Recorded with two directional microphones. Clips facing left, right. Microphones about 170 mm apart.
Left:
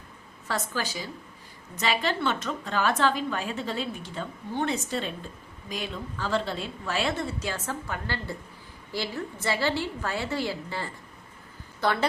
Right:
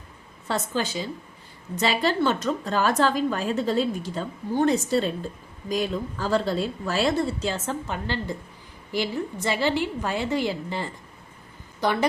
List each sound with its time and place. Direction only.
0.4 s a woman's voice: 25° right (ahead or behind)